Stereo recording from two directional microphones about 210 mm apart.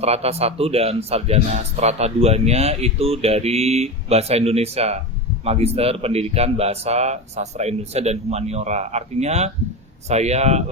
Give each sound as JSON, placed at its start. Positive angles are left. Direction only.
{"t": 0.0, "sound": "a man's voice", "side_deg": -30}